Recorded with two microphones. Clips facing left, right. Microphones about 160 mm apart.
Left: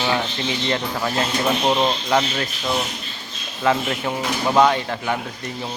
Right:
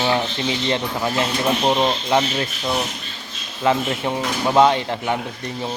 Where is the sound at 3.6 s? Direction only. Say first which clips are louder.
Right 1 dB; 25° right (ahead or behind).